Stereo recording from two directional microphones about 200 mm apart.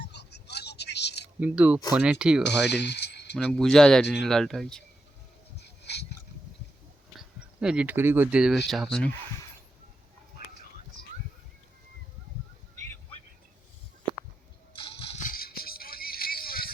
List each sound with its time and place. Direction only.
0.0 s vehicle: 55° left (ahead or behind)
1.4 s speech: 5° right (ahead or behind)
2.4 s speech: 55° left (ahead or behind)
3.3 s speech: 5° left (ahead or behind)
5.5 s a sound: 55° left (ahead or behind)
7.2 s speech: 5° right (ahead or behind)
14.7 s music: 25° left (ahead or behind); by 16.7 s 50° left (ahead or behind)